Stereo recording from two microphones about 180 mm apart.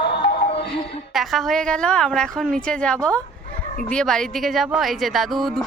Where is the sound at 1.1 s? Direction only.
Centre (ahead or behind).